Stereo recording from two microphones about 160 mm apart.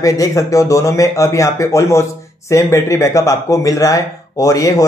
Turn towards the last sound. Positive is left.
turn(degrees=20)  # may be behind; listen again after turning